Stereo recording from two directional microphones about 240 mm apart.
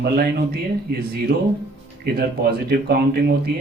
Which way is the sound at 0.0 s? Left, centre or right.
Right.